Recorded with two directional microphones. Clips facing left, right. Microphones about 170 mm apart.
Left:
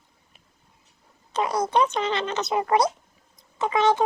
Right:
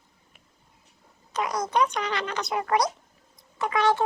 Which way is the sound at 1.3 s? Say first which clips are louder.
Left 3 dB; 30° left (ahead or behind).